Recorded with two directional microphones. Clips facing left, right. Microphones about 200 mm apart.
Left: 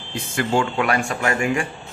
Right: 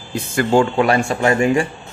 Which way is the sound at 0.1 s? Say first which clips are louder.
Right 6 dB; 45° right (ahead or behind).